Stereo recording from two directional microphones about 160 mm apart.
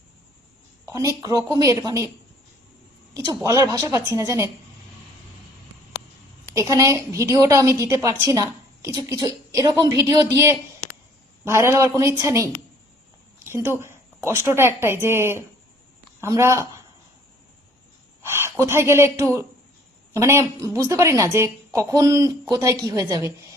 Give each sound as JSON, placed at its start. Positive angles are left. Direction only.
{"t": 0.9, "sound": "a woman's voice", "side_deg": -20}
{"t": 3.4, "sound": "a woman's voice", "side_deg": -20}
{"t": 6.5, "sound": "a woman's voice", "side_deg": -20}
{"t": 18.2, "sound": "a woman's voice", "side_deg": -15}